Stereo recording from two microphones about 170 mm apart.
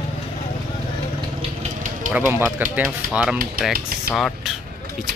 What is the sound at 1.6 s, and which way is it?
Vehicle, 45° right (ahead or behind).